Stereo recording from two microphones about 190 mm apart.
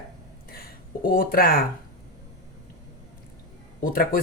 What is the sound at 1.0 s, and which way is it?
Speech, 50° left (ahead or behind).